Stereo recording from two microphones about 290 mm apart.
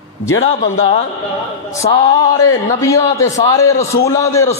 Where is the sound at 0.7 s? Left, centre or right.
Left.